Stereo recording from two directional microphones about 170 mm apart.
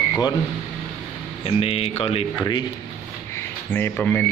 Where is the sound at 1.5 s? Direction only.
35° left (ahead or behind).